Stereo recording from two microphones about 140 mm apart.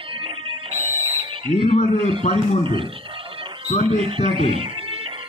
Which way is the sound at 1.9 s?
40° right (ahead or behind).